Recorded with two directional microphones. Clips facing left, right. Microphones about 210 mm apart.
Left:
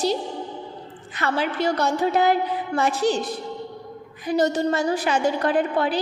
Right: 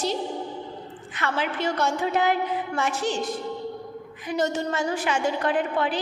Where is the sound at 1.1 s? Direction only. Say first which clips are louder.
Left 3 dB; 35° left (ahead or behind).